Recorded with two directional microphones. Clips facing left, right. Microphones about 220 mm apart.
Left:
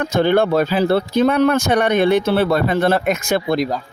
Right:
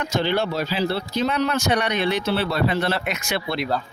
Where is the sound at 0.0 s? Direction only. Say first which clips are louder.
Left 7 dB; 55° left (ahead or behind).